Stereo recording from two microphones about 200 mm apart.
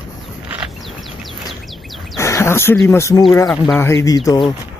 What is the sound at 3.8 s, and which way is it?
Speech, 15° left (ahead or behind).